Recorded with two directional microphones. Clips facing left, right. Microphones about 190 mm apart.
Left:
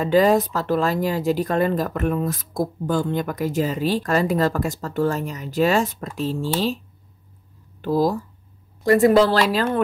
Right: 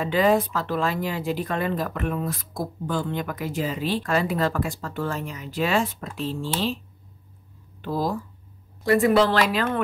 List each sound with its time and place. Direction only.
0.0 s speech: 40° left (ahead or behind)
7.8 s speech: 40° left (ahead or behind)